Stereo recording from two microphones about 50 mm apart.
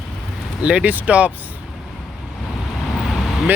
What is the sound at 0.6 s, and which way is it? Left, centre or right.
Speech, right.